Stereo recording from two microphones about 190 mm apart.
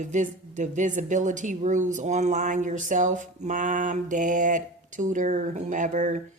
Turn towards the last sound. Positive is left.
turn(degrees=-40)  # may be behind; listen again after turning